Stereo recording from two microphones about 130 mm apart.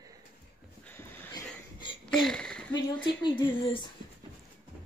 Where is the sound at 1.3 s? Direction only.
35° left (ahead or behind).